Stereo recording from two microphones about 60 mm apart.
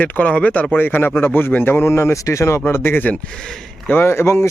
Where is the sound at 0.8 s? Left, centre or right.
Left.